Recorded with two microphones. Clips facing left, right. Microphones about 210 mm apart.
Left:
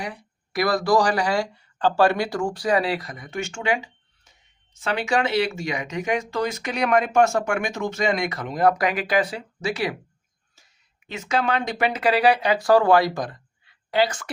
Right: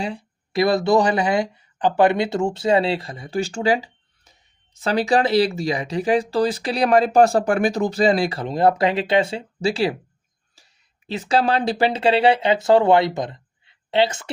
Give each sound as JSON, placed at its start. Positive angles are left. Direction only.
{"t": 0.0, "sound": "speech", "side_deg": -25}